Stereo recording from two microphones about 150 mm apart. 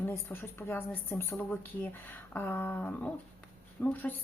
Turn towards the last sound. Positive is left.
turn(degrees=10)  # may be behind; listen again after turning